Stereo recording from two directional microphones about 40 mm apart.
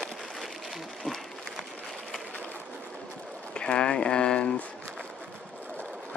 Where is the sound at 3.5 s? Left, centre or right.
Left.